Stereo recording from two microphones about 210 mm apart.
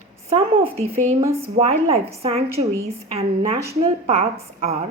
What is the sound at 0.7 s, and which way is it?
A woman's voice, 30° right (ahead or behind).